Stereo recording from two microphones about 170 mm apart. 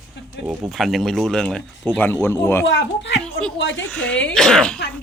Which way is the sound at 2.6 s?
90° left.